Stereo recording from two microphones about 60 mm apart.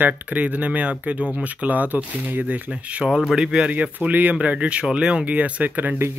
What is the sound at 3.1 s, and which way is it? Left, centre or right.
Speech, centre.